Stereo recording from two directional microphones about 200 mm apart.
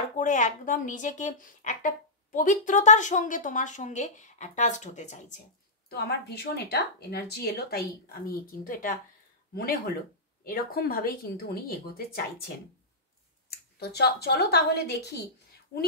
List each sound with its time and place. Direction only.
0.2 s a woman's voice: 40° left (ahead or behind)
5.9 s speech: 50° left (ahead or behind)
13.7 s speech: 55° left (ahead or behind)